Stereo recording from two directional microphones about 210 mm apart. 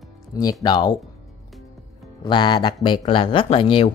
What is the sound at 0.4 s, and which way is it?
Speech, 15° left (ahead or behind).